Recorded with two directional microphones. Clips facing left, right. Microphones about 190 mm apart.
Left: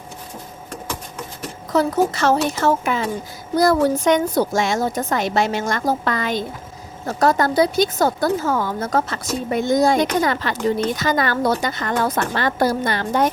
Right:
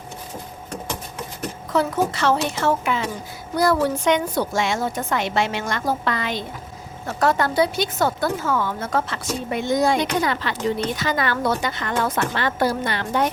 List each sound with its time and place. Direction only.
1.7 s speech: 40° left (ahead or behind)